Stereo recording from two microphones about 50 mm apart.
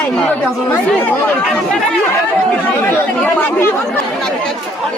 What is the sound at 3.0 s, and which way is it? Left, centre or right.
Speech, left.